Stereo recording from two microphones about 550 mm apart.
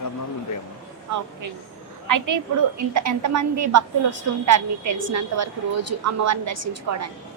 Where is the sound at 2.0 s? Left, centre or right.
Right.